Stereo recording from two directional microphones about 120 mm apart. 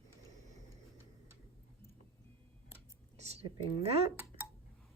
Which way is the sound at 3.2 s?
65° right (ahead or behind).